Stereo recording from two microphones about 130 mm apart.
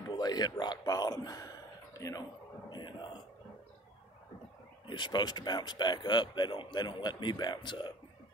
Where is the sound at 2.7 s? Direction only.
35° left (ahead or behind).